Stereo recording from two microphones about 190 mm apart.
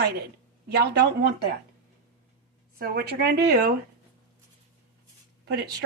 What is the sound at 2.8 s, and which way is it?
Speech, 55° right (ahead or behind).